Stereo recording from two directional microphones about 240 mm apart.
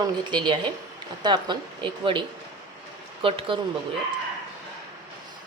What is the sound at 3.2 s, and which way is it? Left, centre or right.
Speech, right.